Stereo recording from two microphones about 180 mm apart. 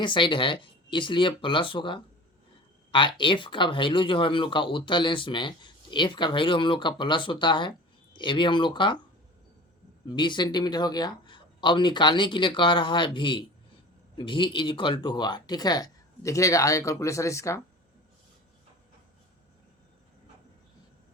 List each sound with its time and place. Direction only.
0.0 s speech: 25° left (ahead or behind)
3.2 s speech: 25° left (ahead or behind)
10.1 s speech: 25° left (ahead or behind)